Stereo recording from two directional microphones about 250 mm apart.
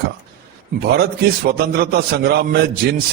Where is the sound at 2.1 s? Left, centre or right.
Right.